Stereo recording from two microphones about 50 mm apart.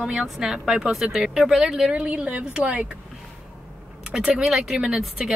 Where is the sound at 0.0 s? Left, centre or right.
Centre.